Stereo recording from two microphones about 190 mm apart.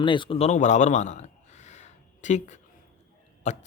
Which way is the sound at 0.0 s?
25° left (ahead or behind).